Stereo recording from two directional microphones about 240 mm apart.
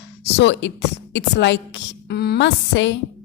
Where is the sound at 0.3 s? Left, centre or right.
Left.